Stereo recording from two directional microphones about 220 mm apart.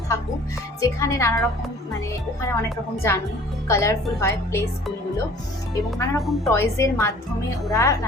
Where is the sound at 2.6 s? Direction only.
10° left (ahead or behind).